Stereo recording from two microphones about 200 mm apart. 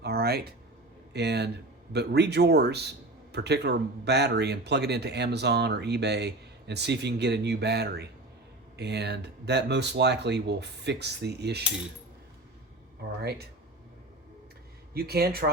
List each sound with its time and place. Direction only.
0.0 s a sound: 50° right (ahead or behind)
1.1 s speech: 55° right (ahead or behind)
14.9 s speech: 50° right (ahead or behind)